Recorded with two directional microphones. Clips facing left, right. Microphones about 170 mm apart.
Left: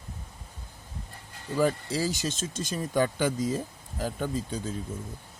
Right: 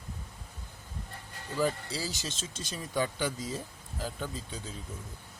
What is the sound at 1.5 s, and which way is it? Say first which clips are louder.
Speech: left 5 dB; 50° left (ahead or behind).